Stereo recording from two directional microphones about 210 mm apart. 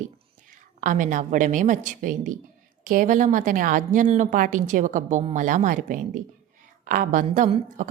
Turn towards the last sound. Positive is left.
turn(degrees=-35)  # may be behind; listen again after turning